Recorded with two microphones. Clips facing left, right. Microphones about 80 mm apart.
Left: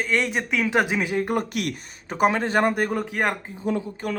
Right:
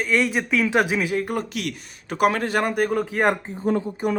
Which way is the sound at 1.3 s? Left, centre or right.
Left.